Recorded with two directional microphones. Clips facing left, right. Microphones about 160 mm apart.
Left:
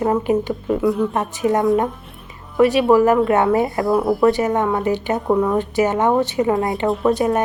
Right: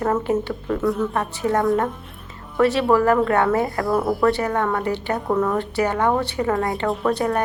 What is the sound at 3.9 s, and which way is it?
Speech, centre (ahead or behind).